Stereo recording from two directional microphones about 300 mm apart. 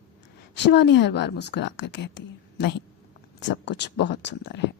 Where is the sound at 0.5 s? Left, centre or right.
Left.